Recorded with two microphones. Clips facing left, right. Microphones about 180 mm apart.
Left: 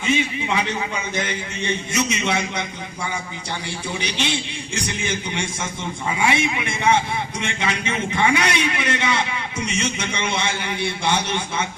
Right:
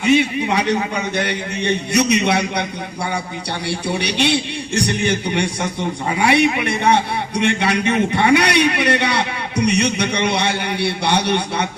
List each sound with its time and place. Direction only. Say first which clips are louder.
0.0 s a man's voice: right 7 dB; 70° right (ahead or behind)
0.4 s a man's voice: right 5 dB; 60° right (ahead or behind)
3.7 s a man's voice: right 9 dB; 70° right (ahead or behind)